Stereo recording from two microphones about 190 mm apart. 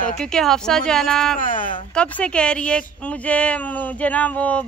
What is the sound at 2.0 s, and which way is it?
A woman's voice, 5° left (ahead or behind).